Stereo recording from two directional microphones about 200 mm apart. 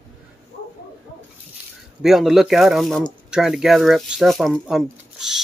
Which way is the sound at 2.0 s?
Centre (ahead or behind).